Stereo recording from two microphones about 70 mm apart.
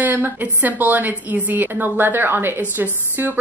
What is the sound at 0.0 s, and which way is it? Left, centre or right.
A woman's voice, right.